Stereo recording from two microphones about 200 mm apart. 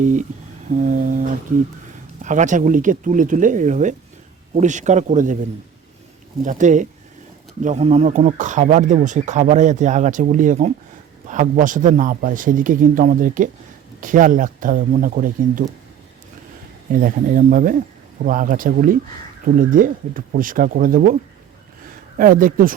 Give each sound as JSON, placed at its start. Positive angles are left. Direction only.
{"t": 0.0, "sound": "speech", "side_deg": -40}
{"t": 6.4, "sound": "speech", "side_deg": -40}
{"t": 17.0, "sound": "speech", "side_deg": -45}
{"t": 22.2, "sound": "speech", "side_deg": -45}